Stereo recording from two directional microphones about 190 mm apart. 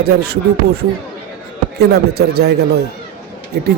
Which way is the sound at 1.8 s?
55° right (ahead or behind).